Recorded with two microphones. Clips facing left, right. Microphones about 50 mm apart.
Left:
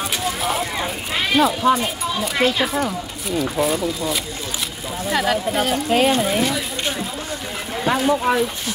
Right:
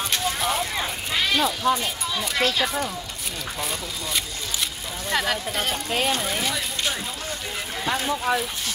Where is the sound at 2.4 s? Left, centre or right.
Left.